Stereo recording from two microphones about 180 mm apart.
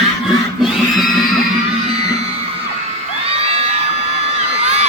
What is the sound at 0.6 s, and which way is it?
Crowd, centre (ahead or behind).